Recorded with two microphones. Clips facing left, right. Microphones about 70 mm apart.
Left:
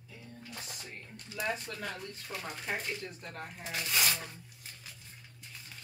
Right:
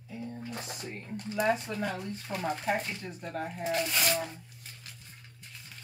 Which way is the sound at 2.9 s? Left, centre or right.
Centre.